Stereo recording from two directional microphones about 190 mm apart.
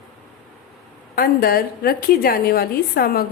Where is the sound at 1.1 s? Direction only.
50° left (ahead or behind).